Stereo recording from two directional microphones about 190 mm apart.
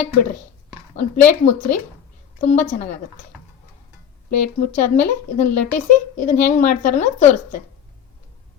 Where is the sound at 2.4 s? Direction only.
35° left (ahead or behind).